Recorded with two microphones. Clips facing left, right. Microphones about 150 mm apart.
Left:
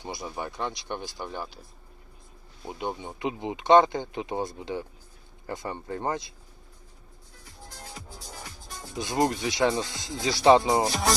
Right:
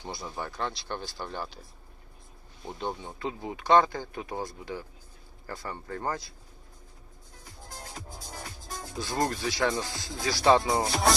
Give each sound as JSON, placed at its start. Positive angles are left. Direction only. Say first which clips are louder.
{"t": 0.0, "sound": "speech", "louder": "left 2 dB", "side_deg": 15}
{"t": 2.6, "sound": "speech", "louder": "left 2 dB", "side_deg": 10}
{"t": 9.0, "sound": "speech", "louder": "left 4 dB", "side_deg": 20}